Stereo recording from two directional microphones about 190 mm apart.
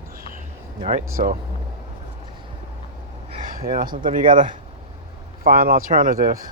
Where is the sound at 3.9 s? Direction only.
45° right (ahead or behind).